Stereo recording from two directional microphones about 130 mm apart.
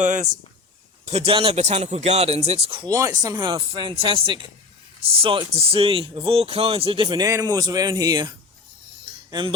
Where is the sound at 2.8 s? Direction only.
25° right (ahead or behind).